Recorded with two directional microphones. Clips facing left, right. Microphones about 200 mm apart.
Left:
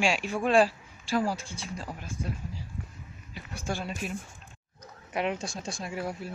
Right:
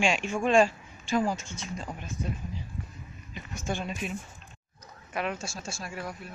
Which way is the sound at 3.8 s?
Centre (ahead or behind).